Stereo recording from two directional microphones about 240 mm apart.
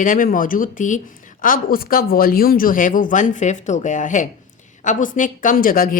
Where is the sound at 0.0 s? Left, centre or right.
Left.